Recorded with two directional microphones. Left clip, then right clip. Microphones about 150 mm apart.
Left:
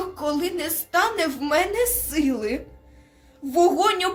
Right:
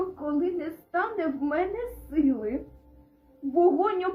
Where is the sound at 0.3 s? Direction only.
15° left (ahead or behind).